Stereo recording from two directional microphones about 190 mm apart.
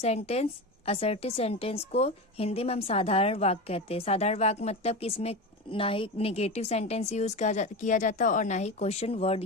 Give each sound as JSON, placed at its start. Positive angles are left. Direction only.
{"t": 0.0, "sound": "a woman's voice", "side_deg": 35}